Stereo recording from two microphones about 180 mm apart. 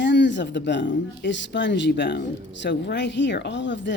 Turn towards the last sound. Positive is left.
turn(degrees=85)